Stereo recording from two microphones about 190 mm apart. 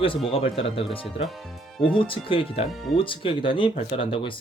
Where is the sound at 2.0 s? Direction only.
30° left (ahead or behind).